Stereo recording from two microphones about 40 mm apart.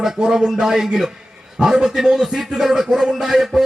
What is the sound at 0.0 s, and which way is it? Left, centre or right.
A man's voice, centre.